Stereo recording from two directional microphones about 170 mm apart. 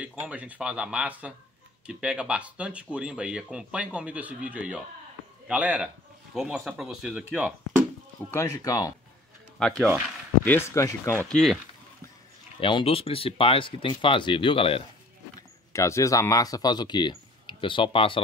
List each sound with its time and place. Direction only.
0.0 s speech: 5° right (ahead or behind)
8.3 s speech: 15° left (ahead or behind)
9.6 s speech: 5° left (ahead or behind)
10.4 s speech: 15° left (ahead or behind)
11.2 s speech: centre (ahead or behind)
12.5 s speech: 30° left (ahead or behind)
15.7 s speech: 15° left (ahead or behind)